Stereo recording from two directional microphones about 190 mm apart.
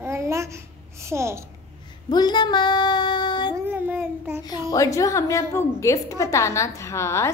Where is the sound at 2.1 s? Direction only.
20° left (ahead or behind).